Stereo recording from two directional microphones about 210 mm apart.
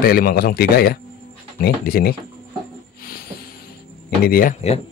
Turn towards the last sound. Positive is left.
turn(degrees=45)  # may be behind; listen again after turning